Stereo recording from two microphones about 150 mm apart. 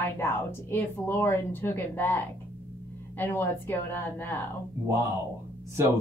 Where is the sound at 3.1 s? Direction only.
15° left (ahead or behind).